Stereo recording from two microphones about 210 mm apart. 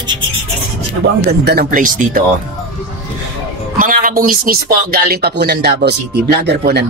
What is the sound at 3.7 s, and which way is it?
Speech, 40° right (ahead or behind).